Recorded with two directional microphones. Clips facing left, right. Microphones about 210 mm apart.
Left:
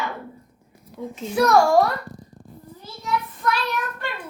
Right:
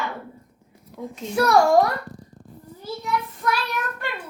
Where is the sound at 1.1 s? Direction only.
5° left (ahead or behind).